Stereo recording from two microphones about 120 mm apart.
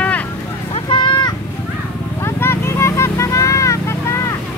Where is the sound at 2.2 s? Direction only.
20° left (ahead or behind).